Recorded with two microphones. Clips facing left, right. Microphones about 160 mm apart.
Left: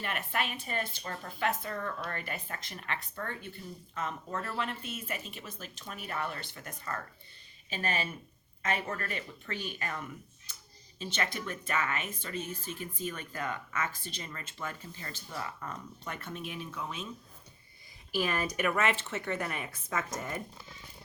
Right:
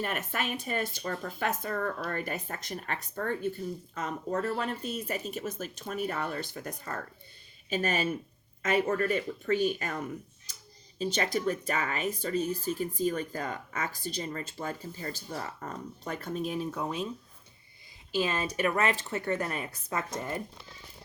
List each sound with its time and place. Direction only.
0.0 s speech: 45° right (ahead or behind)
18.1 s speech: 20° right (ahead or behind)